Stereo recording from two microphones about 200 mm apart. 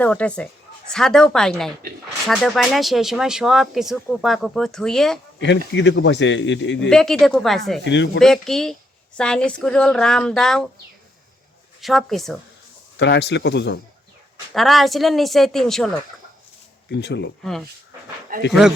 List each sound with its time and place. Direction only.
0.0 s speech: 5° left (ahead or behind)
5.4 s a man's voice: 65° left (ahead or behind)
6.9 s speech: centre (ahead or behind)
7.9 s a man's voice: 65° left (ahead or behind)
8.2 s speech: centre (ahead or behind)
11.8 s speech: centre (ahead or behind)
13.0 s a man's voice: 60° left (ahead or behind)
14.5 s speech: centre (ahead or behind)
16.9 s a man's voice: 60° left (ahead or behind)
17.4 s speech: centre (ahead or behind)